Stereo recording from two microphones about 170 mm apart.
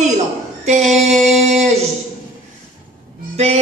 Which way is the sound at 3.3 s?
40° right (ahead or behind).